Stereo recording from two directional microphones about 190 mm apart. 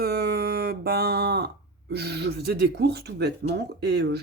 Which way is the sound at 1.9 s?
60° right (ahead or behind).